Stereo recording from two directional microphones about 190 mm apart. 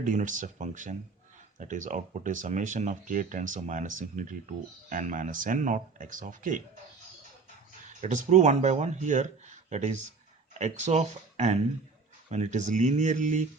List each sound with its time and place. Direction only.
0.0 s speech: 40° right (ahead or behind)
7.9 s speech: 40° right (ahead or behind)